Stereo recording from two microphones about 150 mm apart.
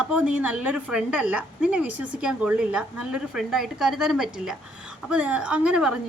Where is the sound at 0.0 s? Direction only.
5° right (ahead or behind).